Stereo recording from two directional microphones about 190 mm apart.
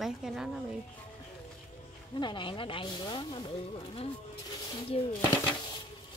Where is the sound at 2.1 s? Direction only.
25° left (ahead or behind).